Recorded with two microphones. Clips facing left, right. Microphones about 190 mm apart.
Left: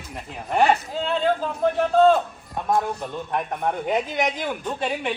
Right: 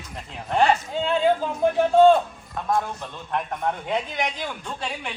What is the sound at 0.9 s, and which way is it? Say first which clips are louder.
Speech: right 2 dB; centre (ahead or behind).